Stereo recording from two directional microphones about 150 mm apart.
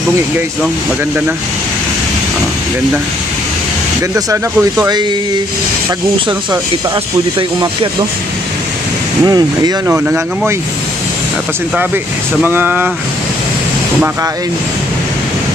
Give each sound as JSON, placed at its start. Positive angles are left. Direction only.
{"t": 4.1, "sound": "speech", "side_deg": -20}
{"t": 9.2, "sound": "speech", "side_deg": -25}
{"t": 9.9, "sound": "speech", "side_deg": -15}
{"t": 11.7, "sound": "speech", "side_deg": -10}